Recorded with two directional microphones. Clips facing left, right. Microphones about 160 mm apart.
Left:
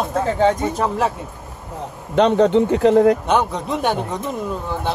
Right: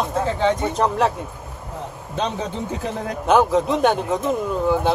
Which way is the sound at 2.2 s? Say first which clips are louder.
Left 12 dB; 70° left (ahead or behind).